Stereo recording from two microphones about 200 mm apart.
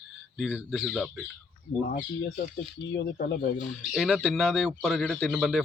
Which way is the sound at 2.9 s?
55° left (ahead or behind).